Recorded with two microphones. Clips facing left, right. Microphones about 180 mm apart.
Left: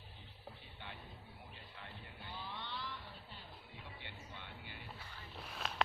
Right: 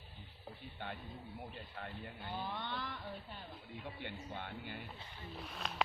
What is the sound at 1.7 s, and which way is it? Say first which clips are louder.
Vehicle: right 7 dB; 55° right (ahead or behind).